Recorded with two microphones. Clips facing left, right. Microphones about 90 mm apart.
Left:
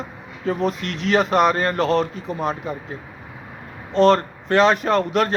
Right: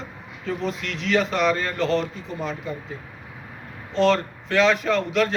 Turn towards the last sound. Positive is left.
turn(degrees=45)  # may be behind; listen again after turning